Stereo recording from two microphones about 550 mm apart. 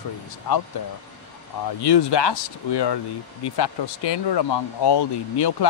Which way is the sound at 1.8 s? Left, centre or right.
Left.